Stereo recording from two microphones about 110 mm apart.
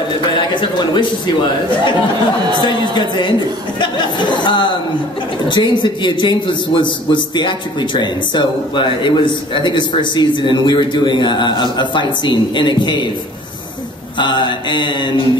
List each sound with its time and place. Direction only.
0.6 s a man's voice: 45° left (ahead or behind)
2.6 s a man's voice: 45° left (ahead or behind)
14.1 s a man's voice: 45° left (ahead or behind)